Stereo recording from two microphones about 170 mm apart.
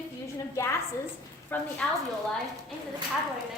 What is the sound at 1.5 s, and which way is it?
Speech, 10° left (ahead or behind).